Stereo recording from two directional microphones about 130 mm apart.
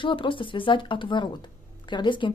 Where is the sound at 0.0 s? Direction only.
40° left (ahead or behind).